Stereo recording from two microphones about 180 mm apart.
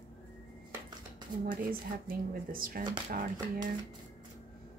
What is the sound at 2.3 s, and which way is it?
Speech, 55° right (ahead or behind).